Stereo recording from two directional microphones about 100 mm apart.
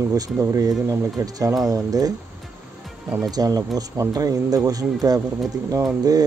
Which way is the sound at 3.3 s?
40° right (ahead or behind).